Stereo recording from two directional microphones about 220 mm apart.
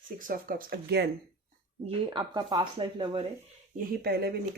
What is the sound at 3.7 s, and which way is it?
Speech, 45° right (ahead or behind).